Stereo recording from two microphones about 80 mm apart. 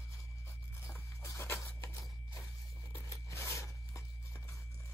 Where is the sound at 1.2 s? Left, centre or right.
Left.